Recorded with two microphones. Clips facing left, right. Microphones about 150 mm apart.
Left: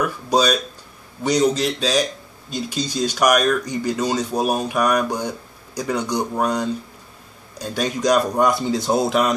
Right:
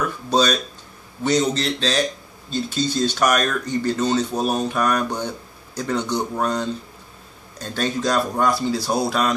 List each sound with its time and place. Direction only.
0.0 s speech: 10° left (ahead or behind)